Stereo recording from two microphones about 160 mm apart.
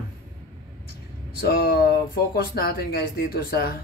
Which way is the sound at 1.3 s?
75° left (ahead or behind).